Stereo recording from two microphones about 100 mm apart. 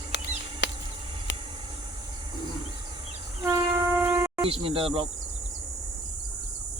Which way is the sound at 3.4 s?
25° right (ahead or behind).